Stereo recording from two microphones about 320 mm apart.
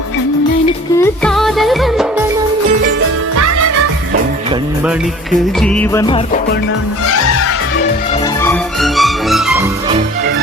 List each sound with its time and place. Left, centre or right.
0.9 s music: centre
3.3 s music: right
5.5 s music: centre
8.2 s music: centre